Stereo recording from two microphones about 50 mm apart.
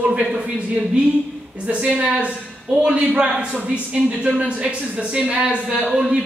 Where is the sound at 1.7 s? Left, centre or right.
Right.